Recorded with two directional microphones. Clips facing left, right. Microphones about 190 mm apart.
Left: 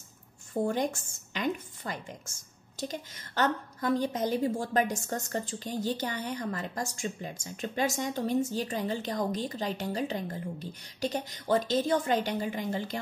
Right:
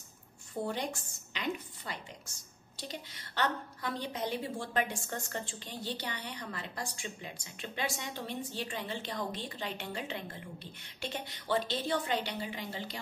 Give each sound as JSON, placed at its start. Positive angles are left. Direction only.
{"t": 0.7, "sound": "a woman's voice", "side_deg": 45}